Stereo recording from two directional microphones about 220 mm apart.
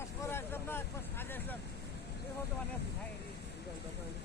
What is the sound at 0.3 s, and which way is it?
Vehicle, 10° left (ahead or behind).